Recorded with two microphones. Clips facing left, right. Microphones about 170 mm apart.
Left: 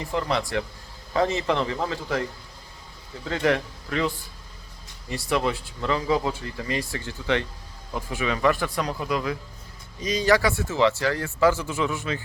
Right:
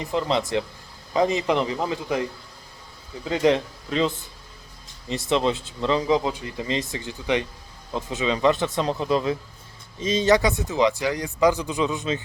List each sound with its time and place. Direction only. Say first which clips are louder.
0.0 s speech: right 2 dB; 20° right (ahead or behind)
3.2 s speech: right 3 dB; 20° right (ahead or behind)